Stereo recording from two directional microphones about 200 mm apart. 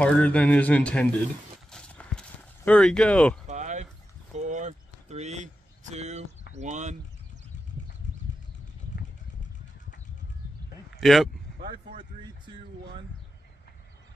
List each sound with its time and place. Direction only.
0.0 s speech: 5° left (ahead or behind)
1.7 s clip-clop: 5° left (ahead or behind)
3.4 s a sound: 35° right (ahead or behind)
6.5 s speech: 35° right (ahead or behind)
11.0 s speech: centre (ahead or behind)